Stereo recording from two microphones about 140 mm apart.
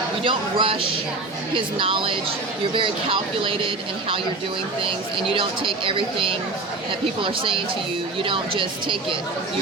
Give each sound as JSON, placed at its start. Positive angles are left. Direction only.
{"t": 0.3, "sound": "speech", "side_deg": -40}
{"t": 5.3, "sound": "speech", "side_deg": -40}